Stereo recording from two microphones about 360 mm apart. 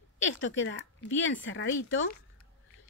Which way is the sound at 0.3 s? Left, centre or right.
Left.